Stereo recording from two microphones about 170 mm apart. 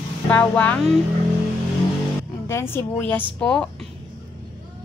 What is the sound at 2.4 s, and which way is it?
A woman's voice, 15° left (ahead or behind).